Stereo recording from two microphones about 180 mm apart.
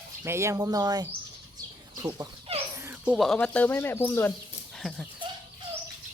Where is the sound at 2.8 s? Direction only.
10° right (ahead or behind).